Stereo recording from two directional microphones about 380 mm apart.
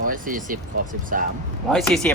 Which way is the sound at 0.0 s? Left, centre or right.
Right.